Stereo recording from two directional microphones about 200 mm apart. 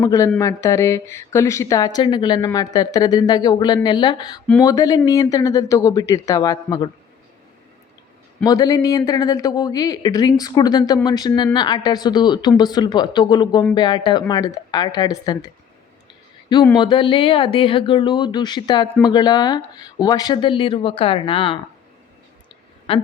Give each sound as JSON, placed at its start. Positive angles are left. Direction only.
{"t": 0.0, "sound": "speech", "side_deg": 15}
{"t": 8.4, "sound": "speech", "side_deg": 20}
{"t": 16.7, "sound": "speech", "side_deg": 25}
{"t": 22.9, "sound": "speech", "side_deg": 25}